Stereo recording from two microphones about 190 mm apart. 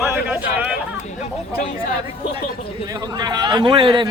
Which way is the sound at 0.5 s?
10° right (ahead or behind).